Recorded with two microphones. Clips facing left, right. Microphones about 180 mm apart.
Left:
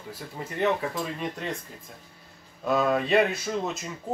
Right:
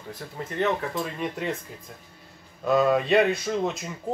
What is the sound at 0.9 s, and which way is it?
Speech, centre (ahead or behind).